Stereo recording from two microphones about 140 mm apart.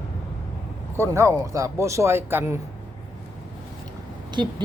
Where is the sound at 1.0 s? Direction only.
20° right (ahead or behind).